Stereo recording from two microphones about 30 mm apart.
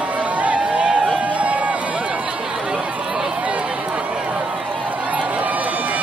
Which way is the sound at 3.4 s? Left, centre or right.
Right.